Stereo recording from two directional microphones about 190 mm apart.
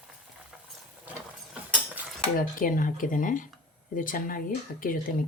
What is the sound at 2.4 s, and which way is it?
Speech, 45° left (ahead or behind).